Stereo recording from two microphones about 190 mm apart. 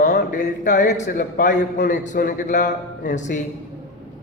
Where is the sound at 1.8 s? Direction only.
40° left (ahead or behind).